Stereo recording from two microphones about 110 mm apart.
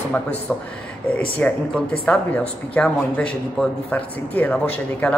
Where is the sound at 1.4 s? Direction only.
10° left (ahead or behind).